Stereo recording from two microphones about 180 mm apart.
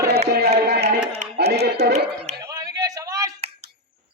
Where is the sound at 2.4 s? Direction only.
20° right (ahead or behind).